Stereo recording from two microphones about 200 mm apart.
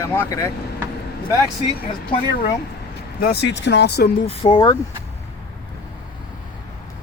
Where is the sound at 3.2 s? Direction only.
55° left (ahead or behind).